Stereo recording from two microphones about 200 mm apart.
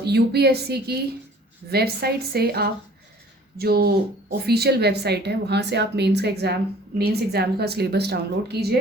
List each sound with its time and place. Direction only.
0.0 s a woman's voice: 55° right (ahead or behind)